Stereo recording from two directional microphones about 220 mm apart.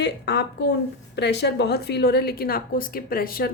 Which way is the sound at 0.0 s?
50° left (ahead or behind).